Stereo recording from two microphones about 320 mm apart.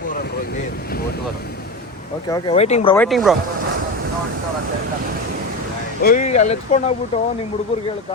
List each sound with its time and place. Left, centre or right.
2.3 s speech: centre
2.9 s speech: centre
6.0 s speech: left